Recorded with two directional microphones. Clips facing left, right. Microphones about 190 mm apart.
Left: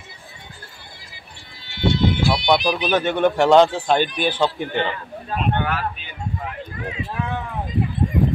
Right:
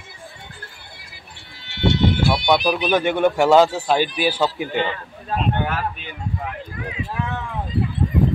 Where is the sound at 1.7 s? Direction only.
70° right (ahead or behind).